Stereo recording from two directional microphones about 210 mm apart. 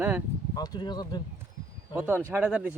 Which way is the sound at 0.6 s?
20° left (ahead or behind).